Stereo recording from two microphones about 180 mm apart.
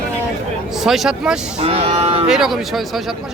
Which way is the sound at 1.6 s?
30° right (ahead or behind).